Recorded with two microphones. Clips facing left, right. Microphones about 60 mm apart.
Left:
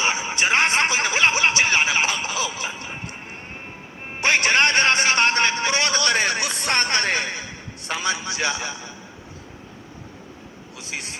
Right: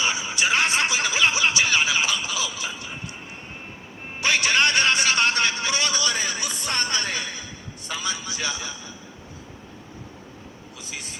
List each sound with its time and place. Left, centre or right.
0.0 s a sound: left
4.2 s music: left
10.8 s a man's voice: left